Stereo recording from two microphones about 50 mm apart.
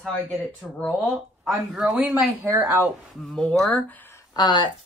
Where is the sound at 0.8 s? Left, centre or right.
Centre.